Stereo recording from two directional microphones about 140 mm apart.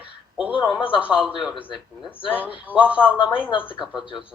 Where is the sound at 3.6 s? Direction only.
15° left (ahead or behind).